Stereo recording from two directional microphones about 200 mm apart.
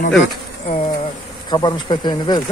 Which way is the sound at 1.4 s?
20° left (ahead or behind).